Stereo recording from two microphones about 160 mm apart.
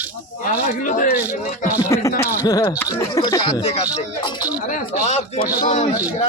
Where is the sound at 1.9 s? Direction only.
20° left (ahead or behind).